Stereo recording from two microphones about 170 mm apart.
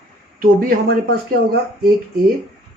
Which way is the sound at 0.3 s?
60° right (ahead or behind).